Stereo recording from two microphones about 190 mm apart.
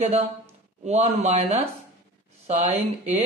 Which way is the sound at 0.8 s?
35° right (ahead or behind).